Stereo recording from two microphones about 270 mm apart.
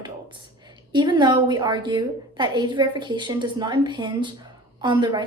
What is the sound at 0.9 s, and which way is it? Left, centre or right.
A woman's voice, centre.